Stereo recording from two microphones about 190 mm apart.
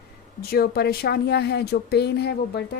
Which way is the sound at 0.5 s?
55° left (ahead or behind).